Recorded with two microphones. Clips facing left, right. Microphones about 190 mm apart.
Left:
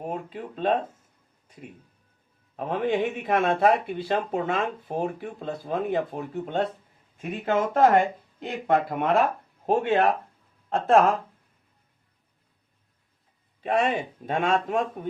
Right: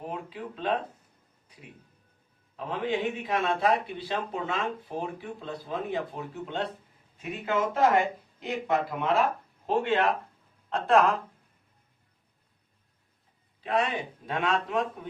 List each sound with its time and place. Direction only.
0.0 s speech: 45° left (ahead or behind)
2.6 s speech: 50° left (ahead or behind)
13.6 s speech: 50° left (ahead or behind)